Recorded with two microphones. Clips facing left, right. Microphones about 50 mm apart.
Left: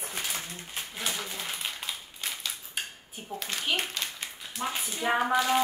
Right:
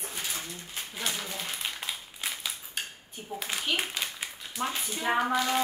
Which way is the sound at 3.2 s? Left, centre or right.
Centre.